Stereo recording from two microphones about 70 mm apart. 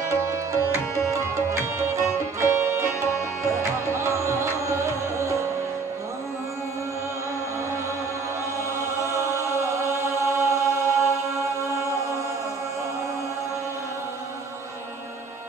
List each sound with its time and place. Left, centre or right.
0.1 s music: right
3.9 s music: right
9.5 s chant: right